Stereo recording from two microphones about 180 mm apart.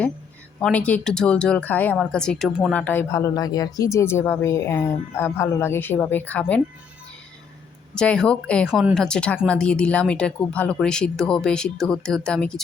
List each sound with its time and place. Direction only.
0.6 s speech: 5° left (ahead or behind)
2.7 s speech: 10° left (ahead or behind)
7.9 s speech: 5° left (ahead or behind)
8.7 s speech: 5° right (ahead or behind)